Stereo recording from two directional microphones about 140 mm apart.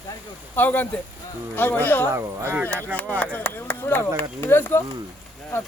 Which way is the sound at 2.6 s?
10° left (ahead or behind).